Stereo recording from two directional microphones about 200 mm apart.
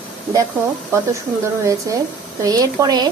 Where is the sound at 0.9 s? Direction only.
15° right (ahead or behind).